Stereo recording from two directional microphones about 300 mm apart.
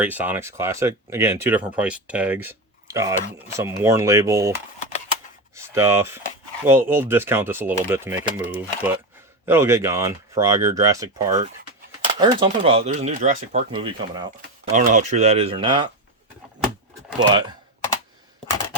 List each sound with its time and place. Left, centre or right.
0.0 s speech: centre
5.6 s speech: centre
17.2 s speech: centre